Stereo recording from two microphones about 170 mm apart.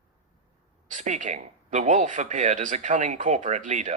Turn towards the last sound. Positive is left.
turn(degrees=-45)  # may be behind; listen again after turning